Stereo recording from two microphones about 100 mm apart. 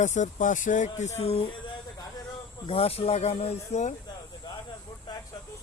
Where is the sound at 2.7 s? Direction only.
75° left (ahead or behind).